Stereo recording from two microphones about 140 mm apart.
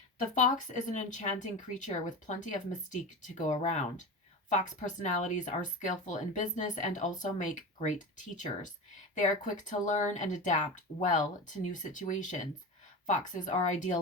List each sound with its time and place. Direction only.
0.2 s speech: 65° left (ahead or behind)